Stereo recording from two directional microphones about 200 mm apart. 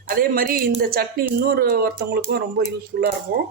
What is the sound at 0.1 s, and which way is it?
Speech, 45° right (ahead or behind).